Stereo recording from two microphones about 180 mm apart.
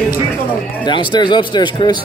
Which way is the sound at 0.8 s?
25° left (ahead or behind).